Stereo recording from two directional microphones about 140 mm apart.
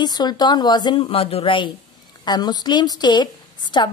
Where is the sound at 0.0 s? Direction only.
30° left (ahead or behind).